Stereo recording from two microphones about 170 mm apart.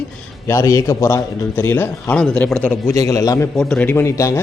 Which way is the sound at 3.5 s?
5° left (ahead or behind).